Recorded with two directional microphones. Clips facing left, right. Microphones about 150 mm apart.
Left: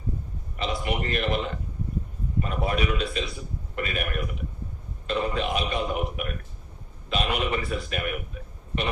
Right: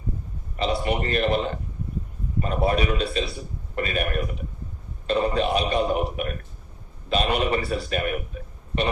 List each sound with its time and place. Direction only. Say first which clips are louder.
0.6 s a man's voice: right 4 dB; 35° right (ahead or behind)